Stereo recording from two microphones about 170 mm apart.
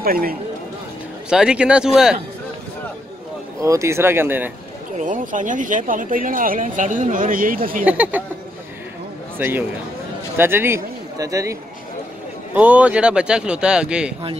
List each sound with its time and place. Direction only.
0.0 s speech: 60° right (ahead or behind)
1.3 s speech: 5° right (ahead or behind)
3.6 s speech: 15° right (ahead or behind)
4.9 s speech: 50° right (ahead or behind)
7.8 s speech: 10° right (ahead or behind)
9.4 s speech: 10° right (ahead or behind)
12.5 s speech: 10° right (ahead or behind)